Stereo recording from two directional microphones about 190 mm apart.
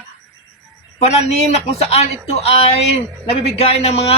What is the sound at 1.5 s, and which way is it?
Speech, 35° left (ahead or behind).